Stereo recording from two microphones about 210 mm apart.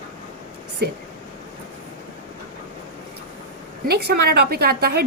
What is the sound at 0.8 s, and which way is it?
Speech, 50° right (ahead or behind).